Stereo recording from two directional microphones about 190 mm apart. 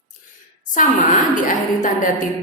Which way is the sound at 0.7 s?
45° left (ahead or behind).